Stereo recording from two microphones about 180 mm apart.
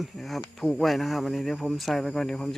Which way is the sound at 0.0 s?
Centre (ahead or behind).